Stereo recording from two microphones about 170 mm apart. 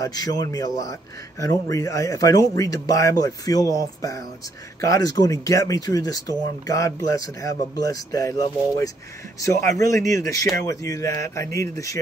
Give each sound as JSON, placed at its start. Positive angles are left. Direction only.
{"t": 0.0, "sound": "speech", "side_deg": 20}